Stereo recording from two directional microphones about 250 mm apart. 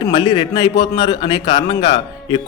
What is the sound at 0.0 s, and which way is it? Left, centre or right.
A man's voice, centre.